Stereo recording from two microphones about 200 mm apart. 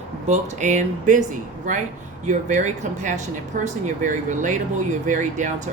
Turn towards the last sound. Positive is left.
turn(degrees=-35)  # may be behind; listen again after turning